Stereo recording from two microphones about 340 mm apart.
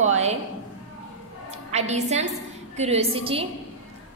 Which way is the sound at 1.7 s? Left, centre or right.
Centre.